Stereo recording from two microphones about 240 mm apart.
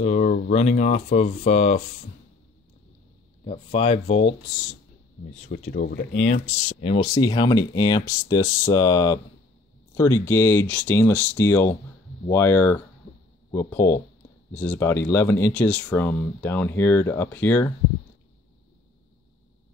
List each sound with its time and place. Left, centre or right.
0.0 s speech: left
3.4 s speech: left
5.5 s speech: left
6.3 s speech: left; by 17.7 s centre